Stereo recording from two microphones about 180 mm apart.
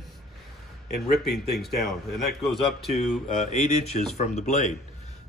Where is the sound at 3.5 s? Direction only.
40° left (ahead or behind).